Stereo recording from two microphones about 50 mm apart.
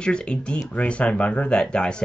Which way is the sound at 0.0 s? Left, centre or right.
Centre.